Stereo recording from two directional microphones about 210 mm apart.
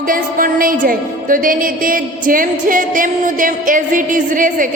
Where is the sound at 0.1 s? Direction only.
40° right (ahead or behind).